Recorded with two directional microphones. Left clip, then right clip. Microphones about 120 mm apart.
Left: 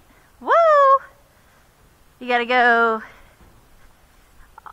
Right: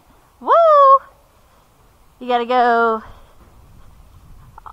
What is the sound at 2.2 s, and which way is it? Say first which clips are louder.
Speech: right 2 dB; 40° left (ahead or behind).